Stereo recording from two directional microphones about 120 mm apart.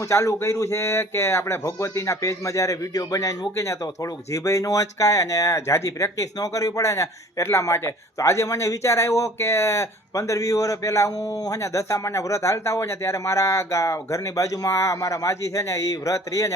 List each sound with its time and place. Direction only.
0.0 s speech: 25° left (ahead or behind)